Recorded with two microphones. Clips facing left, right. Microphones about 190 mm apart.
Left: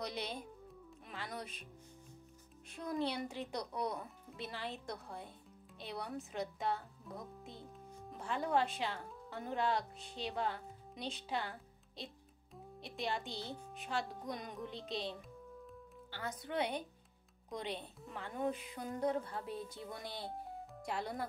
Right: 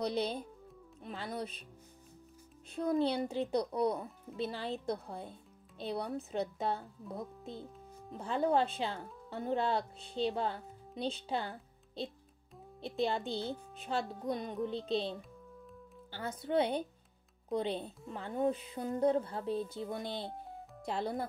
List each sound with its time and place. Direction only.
0.0 s a woman's voice: 30° right (ahead or behind)
2.7 s a woman's voice: 30° right (ahead or behind)
16.1 s a woman's voice: 30° right (ahead or behind)